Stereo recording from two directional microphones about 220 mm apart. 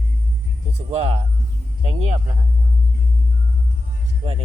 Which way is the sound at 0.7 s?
30° right (ahead or behind).